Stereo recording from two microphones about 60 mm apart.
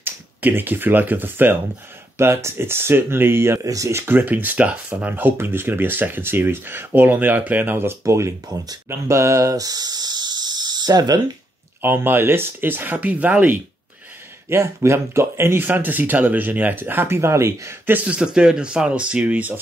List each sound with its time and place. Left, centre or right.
0.0 s speech: right
2.1 s speech: right
3.6 s speech: right
4.0 s speech: right
5.1 s speech: right
8.0 s speech: right
11.8 s speech: right
14.5 s speech: right
18.0 s speech: centre